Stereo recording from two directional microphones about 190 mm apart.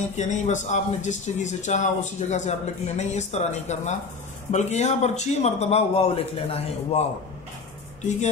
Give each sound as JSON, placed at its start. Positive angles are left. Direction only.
{"t": 0.1, "sound": "speech", "side_deg": 40}